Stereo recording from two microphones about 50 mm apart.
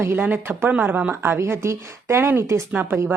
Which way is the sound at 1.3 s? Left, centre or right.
Right.